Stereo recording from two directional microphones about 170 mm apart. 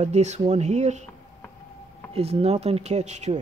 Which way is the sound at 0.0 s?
40° right (ahead or behind).